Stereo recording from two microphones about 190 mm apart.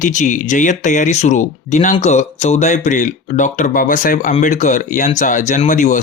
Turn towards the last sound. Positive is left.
turn(degrees=40)  # may be behind; listen again after turning